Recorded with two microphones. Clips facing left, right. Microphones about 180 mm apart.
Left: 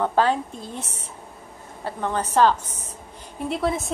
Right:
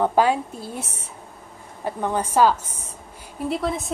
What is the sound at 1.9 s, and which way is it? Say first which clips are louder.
A woman's voice: right 2 dB; 10° right (ahead or behind).